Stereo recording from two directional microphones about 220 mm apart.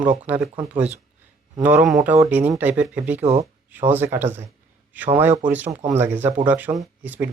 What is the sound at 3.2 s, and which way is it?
Speech, 30° right (ahead or behind).